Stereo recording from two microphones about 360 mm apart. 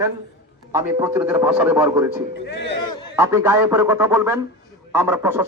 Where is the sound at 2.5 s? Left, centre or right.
Left.